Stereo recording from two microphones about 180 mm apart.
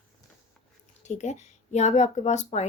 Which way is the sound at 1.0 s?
40° left (ahead or behind).